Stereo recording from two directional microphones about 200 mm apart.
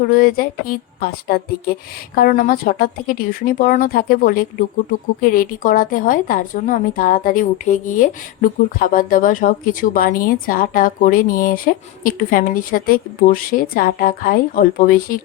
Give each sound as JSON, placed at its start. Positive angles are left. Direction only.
{"t": 0.1, "sound": "a woman's voice", "side_deg": 45}